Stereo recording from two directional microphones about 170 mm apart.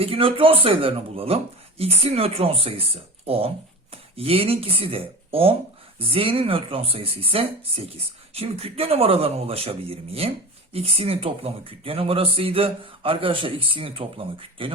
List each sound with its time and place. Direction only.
0.0 s a man's voice: 35° right (ahead or behind)